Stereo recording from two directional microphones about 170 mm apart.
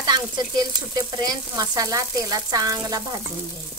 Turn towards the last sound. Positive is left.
turn(degrees=-20)  # may be behind; listen again after turning